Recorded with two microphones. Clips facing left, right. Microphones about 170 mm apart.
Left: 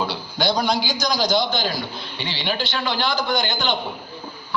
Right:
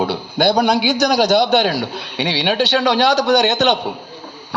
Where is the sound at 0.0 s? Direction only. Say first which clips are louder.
Right 7 dB; 60° right (ahead or behind).